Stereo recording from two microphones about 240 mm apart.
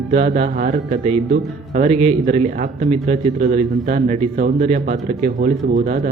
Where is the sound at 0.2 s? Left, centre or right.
Right.